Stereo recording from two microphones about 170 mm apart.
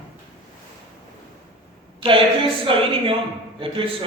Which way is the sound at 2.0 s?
30° right (ahead or behind).